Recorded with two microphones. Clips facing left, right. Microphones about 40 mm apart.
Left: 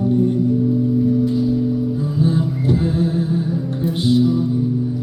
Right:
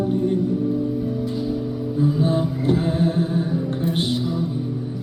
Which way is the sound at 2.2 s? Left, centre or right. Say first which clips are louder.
Left 2 dB; right.